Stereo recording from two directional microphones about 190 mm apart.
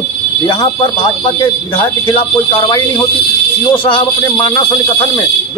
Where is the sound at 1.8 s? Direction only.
25° left (ahead or behind).